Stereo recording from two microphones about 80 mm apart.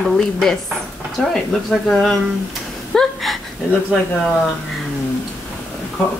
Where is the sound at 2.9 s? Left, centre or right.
Centre.